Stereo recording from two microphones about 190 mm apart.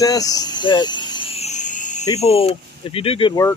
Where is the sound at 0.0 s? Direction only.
20° left (ahead or behind); by 2.0 s 40° left (ahead or behind).